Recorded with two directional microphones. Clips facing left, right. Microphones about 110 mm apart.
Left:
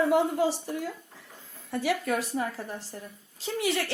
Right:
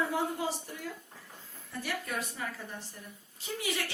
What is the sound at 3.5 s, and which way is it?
Speech, 90° left.